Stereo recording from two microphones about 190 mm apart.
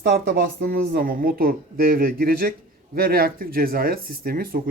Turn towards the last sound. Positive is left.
turn(degrees=-50)  # may be behind; listen again after turning